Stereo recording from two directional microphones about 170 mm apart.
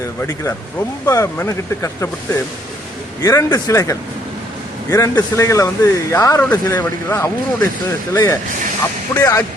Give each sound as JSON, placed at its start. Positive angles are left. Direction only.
{"t": 0.2, "sound": "speech", "side_deg": 15}